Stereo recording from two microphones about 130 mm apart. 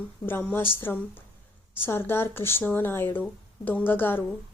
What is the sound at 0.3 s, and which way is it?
Speech, 15° left (ahead or behind).